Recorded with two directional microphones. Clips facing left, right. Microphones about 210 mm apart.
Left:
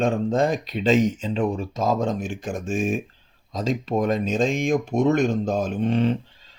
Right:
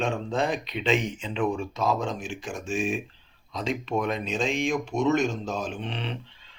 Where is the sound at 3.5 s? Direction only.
40° left (ahead or behind).